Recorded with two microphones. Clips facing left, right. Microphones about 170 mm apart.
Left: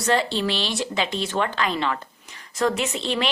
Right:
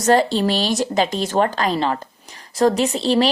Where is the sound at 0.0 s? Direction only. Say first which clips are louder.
Right 6 dB; 40° right (ahead or behind).